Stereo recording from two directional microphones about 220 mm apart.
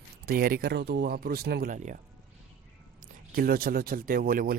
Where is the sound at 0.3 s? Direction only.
40° right (ahead or behind).